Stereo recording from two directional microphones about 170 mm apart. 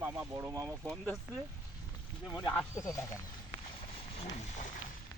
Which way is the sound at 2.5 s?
20° left (ahead or behind).